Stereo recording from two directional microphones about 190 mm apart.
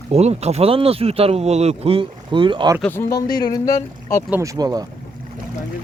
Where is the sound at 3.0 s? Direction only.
20° left (ahead or behind).